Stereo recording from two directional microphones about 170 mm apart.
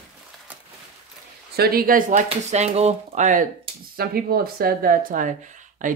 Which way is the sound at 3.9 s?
60° right (ahead or behind).